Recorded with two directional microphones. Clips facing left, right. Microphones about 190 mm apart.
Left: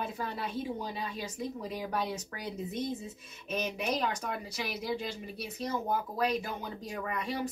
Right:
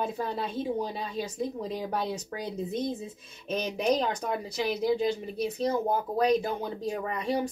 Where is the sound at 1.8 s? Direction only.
30° right (ahead or behind).